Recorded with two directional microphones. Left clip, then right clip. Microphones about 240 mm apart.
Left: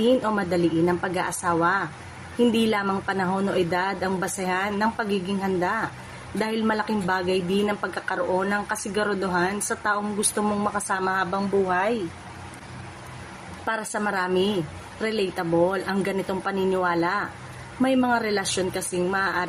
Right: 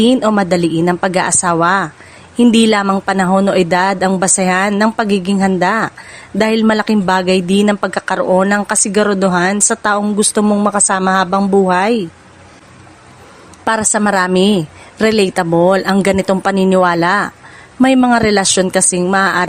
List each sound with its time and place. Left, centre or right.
0.0 s a woman's voice: right
13.7 s a woman's voice: right